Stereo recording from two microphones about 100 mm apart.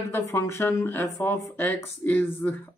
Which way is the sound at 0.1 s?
25° left (ahead or behind).